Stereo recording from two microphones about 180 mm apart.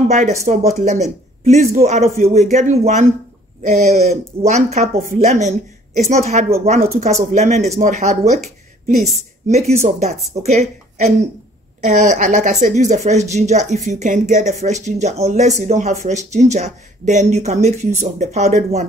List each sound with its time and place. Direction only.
0.1 s speech: 40° right (ahead or behind)